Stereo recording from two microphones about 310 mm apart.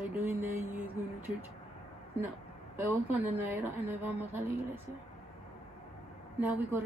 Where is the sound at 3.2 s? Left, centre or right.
Centre.